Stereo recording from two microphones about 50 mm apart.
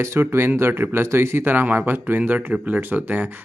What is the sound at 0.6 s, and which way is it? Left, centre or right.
Speech, right.